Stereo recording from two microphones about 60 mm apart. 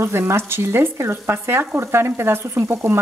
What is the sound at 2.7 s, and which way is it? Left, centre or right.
Speech, right.